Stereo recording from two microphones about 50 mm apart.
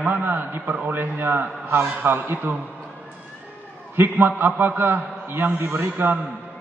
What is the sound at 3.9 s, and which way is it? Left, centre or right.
A man's voice, right.